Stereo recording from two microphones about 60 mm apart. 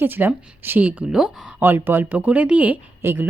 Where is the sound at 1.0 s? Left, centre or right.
Centre.